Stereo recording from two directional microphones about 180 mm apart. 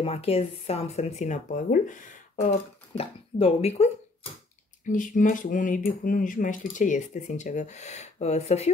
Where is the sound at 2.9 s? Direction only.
35° left (ahead or behind).